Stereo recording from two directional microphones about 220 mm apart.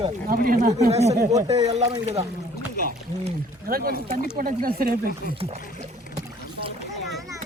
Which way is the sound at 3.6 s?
40° right (ahead or behind).